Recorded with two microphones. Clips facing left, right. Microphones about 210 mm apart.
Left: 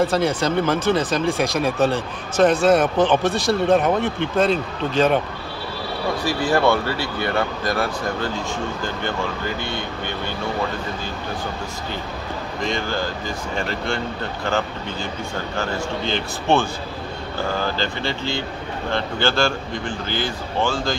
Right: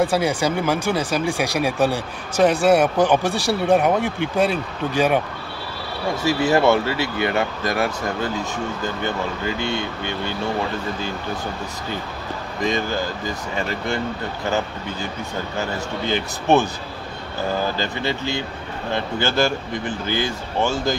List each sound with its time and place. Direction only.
0.0 s speech: 15° right (ahead or behind)
6.2 s speech: 20° right (ahead or behind)
16.1 s speech: 15° right (ahead or behind)
17.7 s speech: 15° right (ahead or behind)